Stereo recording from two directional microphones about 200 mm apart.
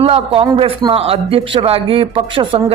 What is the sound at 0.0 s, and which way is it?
Speech, 30° right (ahead or behind).